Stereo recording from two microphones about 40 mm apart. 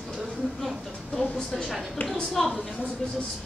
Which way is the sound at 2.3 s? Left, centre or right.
Centre.